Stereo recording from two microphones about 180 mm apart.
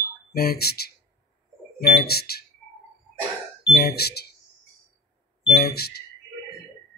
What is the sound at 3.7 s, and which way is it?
Speech, 60° left (ahead or behind).